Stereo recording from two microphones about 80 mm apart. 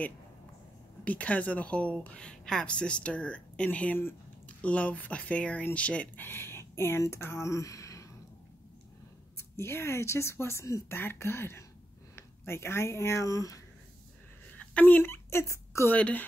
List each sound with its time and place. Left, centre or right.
1.0 s speech: centre
6.2 s speech: left
9.4 s speech: left
14.5 s a sound: centre
15.2 s speech: left
15.9 s a woman's voice: centre